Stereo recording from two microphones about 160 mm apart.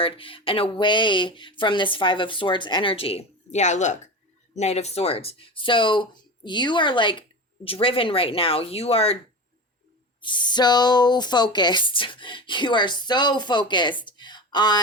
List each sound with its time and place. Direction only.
0.0 s speech: 35° left (ahead or behind)
10.2 s speech: 30° left (ahead or behind)